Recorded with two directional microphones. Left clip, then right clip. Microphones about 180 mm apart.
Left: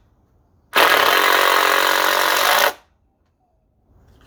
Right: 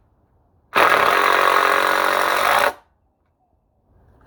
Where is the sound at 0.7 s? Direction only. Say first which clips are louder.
Left 1 dB; 20° right (ahead or behind).